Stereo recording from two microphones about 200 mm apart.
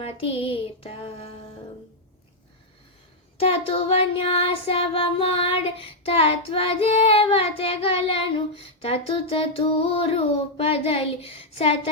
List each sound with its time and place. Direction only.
0.0 s child singing: 30° left (ahead or behind)
3.4 s child singing: 30° left (ahead or behind)